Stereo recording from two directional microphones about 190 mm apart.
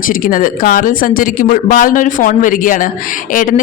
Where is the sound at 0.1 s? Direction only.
45° left (ahead or behind).